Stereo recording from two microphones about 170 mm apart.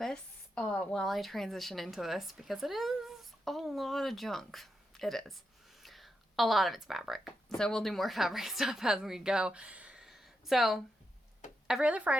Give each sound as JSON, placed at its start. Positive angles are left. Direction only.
{"t": 0.0, "sound": "a woman's voice", "side_deg": 5}